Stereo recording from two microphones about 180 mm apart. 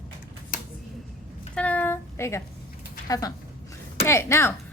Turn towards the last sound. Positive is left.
turn(degrees=15)  # may be behind; listen again after turning